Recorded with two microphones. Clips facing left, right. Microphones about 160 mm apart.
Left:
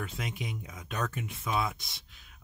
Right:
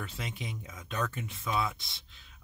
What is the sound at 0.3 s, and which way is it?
Speech, 15° left (ahead or behind).